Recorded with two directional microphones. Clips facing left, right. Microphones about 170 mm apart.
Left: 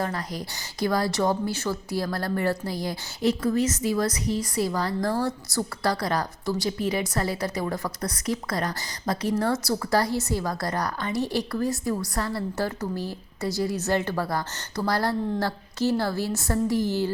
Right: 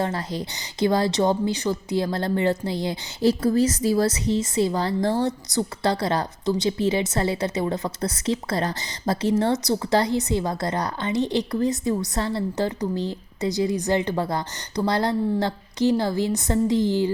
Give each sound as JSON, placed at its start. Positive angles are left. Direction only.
{"t": 0.0, "sound": "a woman's voice", "side_deg": -25}